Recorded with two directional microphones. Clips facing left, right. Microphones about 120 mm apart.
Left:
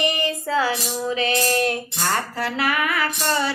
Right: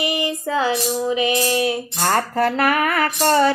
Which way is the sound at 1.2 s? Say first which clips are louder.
Left 1 dB; 10° right (ahead or behind).